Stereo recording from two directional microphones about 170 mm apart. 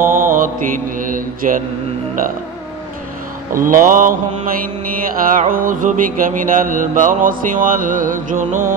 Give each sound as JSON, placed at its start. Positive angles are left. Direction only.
{"t": 0.0, "sound": "mantra", "side_deg": -50}
{"t": 3.5, "sound": "mantra", "side_deg": -55}